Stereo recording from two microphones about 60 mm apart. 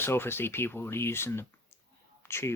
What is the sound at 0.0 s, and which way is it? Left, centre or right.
Speech, left.